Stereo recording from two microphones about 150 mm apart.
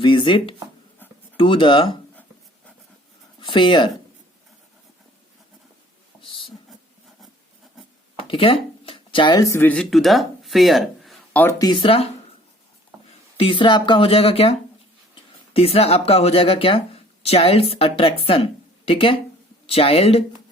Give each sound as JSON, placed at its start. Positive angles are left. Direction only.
{"t": 0.0, "sound": "speech", "side_deg": 30}
{"t": 3.4, "sound": "speech", "side_deg": 30}
{"t": 6.2, "sound": "a sound", "side_deg": 35}
{"t": 8.3, "sound": "speech", "side_deg": 40}
{"t": 9.7, "sound": "speech", "side_deg": 0}
{"t": 11.6, "sound": "speech", "side_deg": 30}
{"t": 13.3, "sound": "speech", "side_deg": 35}
{"t": 15.5, "sound": "speech", "side_deg": 40}